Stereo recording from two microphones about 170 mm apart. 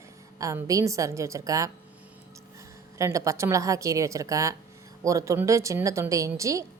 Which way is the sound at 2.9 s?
20° right (ahead or behind).